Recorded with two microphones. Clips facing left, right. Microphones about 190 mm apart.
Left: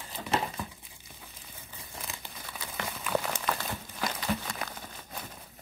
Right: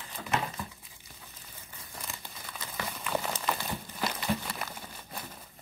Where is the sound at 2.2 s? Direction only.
10° left (ahead or behind); by 5.3 s 10° right (ahead or behind).